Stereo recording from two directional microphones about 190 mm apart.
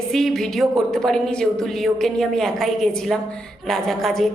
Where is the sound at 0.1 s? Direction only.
Centre (ahead or behind).